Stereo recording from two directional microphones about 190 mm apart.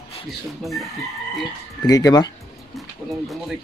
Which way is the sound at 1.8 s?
20° left (ahead or behind).